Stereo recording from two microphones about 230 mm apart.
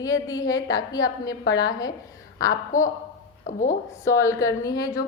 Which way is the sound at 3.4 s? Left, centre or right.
Left.